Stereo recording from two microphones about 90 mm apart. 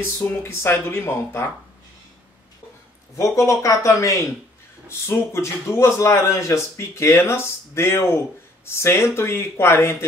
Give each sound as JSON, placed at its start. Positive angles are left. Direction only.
{"t": 0.2, "sound": "speech", "side_deg": 30}
{"t": 3.2, "sound": "speech", "side_deg": 35}